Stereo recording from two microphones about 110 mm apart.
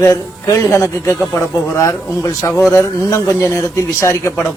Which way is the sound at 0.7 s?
25° left (ahead or behind).